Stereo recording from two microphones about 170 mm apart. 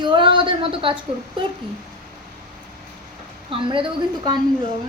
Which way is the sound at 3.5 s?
30° right (ahead or behind).